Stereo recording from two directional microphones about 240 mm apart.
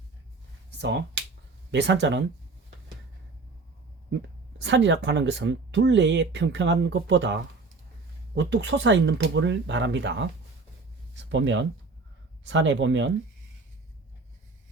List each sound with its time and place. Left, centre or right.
0.8 s speech: right
4.6 s speech: right
8.4 s speech: right
11.3 s speech: right